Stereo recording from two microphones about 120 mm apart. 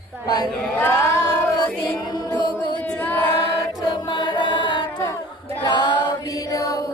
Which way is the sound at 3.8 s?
35° left (ahead or behind).